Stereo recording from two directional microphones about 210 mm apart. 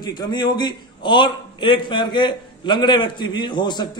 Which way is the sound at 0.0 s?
20° left (ahead or behind).